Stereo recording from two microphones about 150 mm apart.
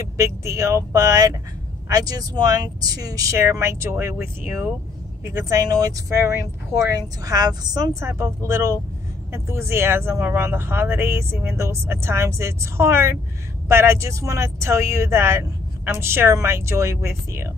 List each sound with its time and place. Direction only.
0.2 s speech: 20° right (ahead or behind)